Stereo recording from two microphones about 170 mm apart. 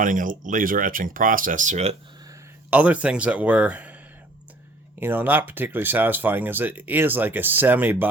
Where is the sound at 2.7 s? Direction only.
10° right (ahead or behind).